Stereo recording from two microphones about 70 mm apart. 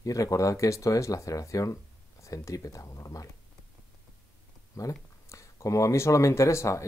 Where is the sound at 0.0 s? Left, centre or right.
Left.